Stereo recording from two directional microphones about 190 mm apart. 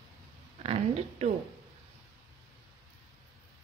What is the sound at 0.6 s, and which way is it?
Speech, 30° right (ahead or behind).